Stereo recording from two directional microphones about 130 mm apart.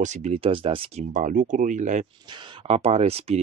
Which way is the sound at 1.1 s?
80° right.